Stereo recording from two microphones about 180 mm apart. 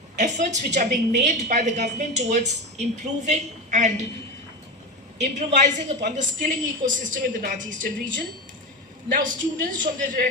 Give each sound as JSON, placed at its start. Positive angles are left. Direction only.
{"t": 0.2, "sound": "a woman's voice", "side_deg": -40}
{"t": 5.2, "sound": "a woman's voice", "side_deg": -40}